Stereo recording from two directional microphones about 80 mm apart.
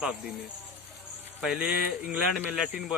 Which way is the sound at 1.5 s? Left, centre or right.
Centre.